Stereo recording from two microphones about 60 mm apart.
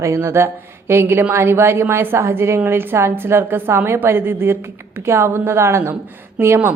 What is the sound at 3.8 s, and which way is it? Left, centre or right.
A woman's voice, right.